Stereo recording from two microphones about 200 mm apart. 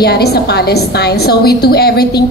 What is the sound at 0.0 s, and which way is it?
A woman's voice, 55° left (ahead or behind).